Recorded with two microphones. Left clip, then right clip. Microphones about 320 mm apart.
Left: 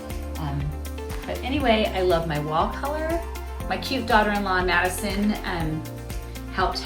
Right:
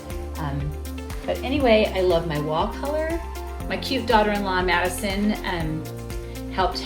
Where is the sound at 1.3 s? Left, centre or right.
Centre.